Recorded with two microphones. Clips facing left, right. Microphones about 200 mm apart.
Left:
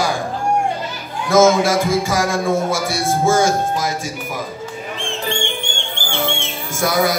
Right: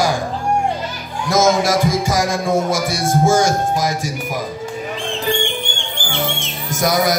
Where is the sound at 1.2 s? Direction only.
15° right (ahead or behind).